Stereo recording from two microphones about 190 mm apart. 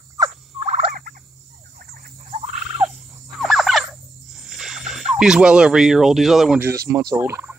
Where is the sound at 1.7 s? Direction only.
55° right (ahead or behind).